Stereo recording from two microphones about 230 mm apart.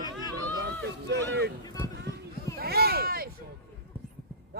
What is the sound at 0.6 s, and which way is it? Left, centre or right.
Speech, right.